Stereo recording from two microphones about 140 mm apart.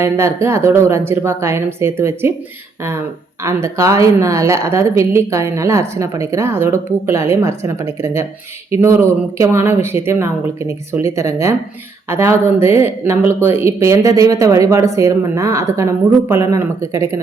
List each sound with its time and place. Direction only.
0.0 s a woman's voice: 20° right (ahead or behind)
3.4 s speech: 20° right (ahead or behind)